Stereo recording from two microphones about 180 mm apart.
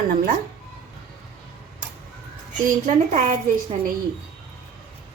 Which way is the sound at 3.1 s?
45° right (ahead or behind).